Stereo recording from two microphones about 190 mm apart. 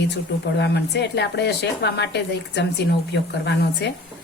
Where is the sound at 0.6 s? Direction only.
60° left (ahead or behind).